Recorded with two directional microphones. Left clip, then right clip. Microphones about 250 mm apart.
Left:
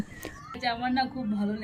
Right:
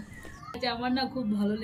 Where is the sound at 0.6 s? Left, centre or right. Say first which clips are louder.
Left 2 dB; centre.